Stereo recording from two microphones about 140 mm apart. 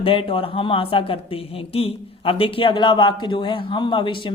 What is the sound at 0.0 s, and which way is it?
Speech, 40° left (ahead or behind).